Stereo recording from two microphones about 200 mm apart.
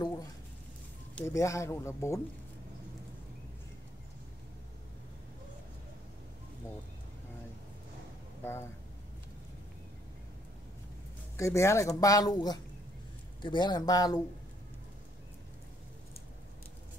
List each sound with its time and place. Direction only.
0.0 s squish: 20° left (ahead or behind)
1.1 s speech: 15° left (ahead or behind)
8.4 s a sound: 10° left (ahead or behind)
11.3 s speech: 15° left (ahead or behind)